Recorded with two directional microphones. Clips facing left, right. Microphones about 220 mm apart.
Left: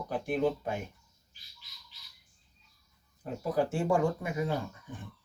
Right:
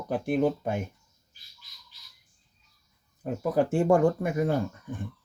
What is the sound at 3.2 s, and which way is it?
Speech, 50° right (ahead or behind).